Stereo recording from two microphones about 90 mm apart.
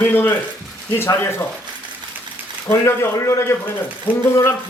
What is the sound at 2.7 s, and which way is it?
Speech, 25° left (ahead or behind).